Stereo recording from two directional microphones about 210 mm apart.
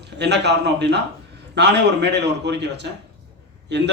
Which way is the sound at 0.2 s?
55° right (ahead or behind).